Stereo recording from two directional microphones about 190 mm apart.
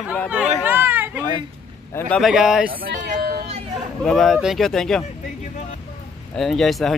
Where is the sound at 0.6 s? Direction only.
10° right (ahead or behind).